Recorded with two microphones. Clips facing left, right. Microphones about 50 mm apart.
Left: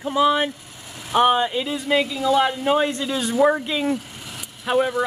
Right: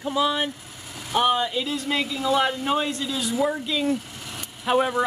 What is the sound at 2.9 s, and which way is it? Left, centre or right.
Speech, left.